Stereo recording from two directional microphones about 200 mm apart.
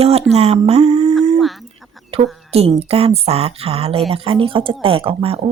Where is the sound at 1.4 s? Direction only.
Centre (ahead or behind).